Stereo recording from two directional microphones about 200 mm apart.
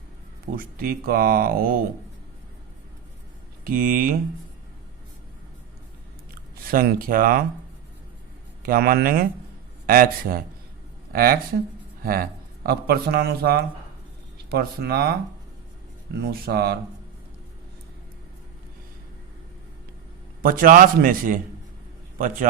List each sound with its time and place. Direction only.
0.5 s a man's voice: 45° right (ahead or behind)
3.6 s a man's voice: 45° right (ahead or behind)
6.7 s a man's voice: 45° right (ahead or behind)
8.6 s a man's voice: 50° right (ahead or behind)
16.1 s a man's voice: 50° right (ahead or behind)
20.4 s a man's voice: 45° right (ahead or behind)